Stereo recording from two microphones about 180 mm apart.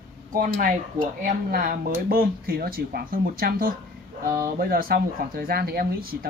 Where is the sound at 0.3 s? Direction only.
50° right (ahead or behind).